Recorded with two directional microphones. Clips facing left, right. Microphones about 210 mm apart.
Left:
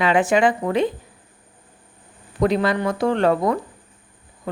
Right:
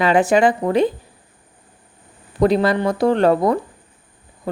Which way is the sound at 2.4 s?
35° right (ahead or behind).